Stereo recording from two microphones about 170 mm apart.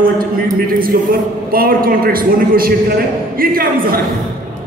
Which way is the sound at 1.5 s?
60° right (ahead or behind).